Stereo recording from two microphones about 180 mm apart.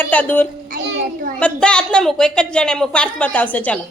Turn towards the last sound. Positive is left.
turn(degrees=10)  # may be behind; listen again after turning